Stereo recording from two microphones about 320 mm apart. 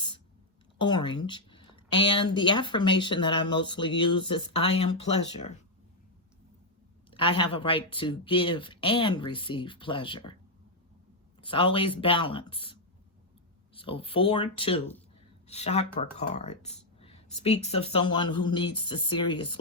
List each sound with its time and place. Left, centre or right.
0.8 s speech: centre
7.1 s speech: centre
11.3 s speech: centre